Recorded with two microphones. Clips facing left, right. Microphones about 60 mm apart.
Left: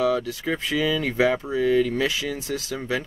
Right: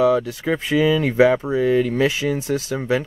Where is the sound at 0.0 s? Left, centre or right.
Right.